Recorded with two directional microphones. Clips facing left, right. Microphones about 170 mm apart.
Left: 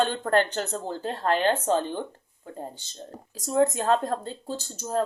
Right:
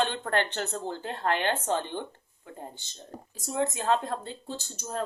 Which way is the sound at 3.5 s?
40° left (ahead or behind).